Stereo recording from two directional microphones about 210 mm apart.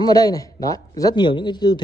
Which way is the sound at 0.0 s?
15° left (ahead or behind).